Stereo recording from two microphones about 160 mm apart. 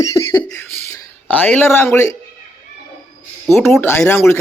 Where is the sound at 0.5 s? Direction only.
10° left (ahead or behind).